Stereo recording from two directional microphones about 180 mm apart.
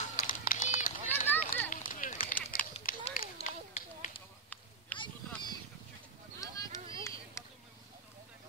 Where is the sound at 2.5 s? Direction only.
50° left (ahead or behind).